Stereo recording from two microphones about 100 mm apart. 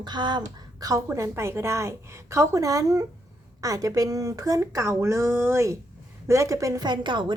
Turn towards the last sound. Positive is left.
turn(degrees=-50)  # may be behind; listen again after turning